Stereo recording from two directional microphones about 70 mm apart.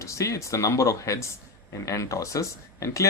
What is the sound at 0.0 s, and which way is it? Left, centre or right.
Speech, left.